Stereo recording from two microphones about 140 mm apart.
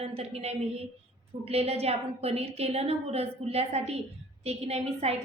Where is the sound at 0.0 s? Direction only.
50° right (ahead or behind).